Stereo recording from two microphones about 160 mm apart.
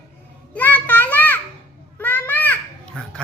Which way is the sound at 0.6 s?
10° left (ahead or behind).